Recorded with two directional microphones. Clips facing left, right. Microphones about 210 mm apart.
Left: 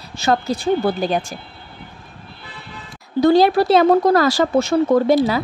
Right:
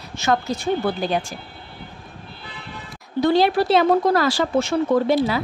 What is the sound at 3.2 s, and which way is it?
Speech, 40° left (ahead or behind).